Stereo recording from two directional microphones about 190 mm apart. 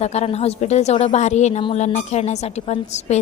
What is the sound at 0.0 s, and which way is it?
A woman's voice, 35° left (ahead or behind).